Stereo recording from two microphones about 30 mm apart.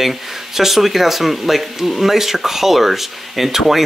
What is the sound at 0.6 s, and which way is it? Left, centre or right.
Speech, centre.